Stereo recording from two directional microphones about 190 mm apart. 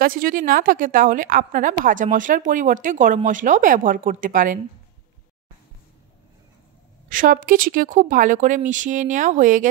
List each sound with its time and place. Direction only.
0.0 s a woman's voice: 50° right (ahead or behind)
7.1 s a woman's voice: 45° right (ahead or behind)